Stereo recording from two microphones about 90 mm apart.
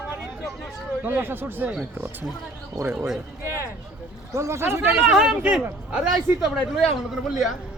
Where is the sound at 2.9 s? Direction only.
5° right (ahead or behind).